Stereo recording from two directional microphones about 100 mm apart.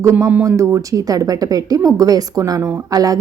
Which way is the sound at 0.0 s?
30° right (ahead or behind).